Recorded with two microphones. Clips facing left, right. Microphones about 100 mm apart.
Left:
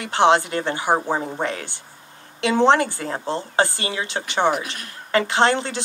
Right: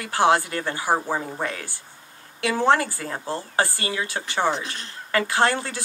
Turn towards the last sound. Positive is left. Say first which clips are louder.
# left 3 dB
turn(degrees=25)  # may be behind; listen again after turning